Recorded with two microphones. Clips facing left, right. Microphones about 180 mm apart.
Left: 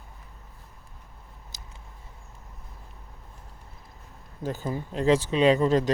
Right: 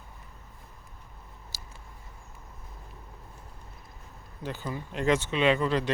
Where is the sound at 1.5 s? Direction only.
20° left (ahead or behind).